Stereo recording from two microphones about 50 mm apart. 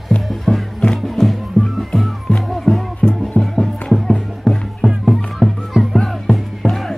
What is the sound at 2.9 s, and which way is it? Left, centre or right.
Music, left.